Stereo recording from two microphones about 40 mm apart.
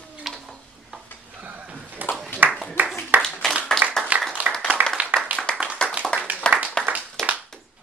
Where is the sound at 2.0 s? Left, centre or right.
Right.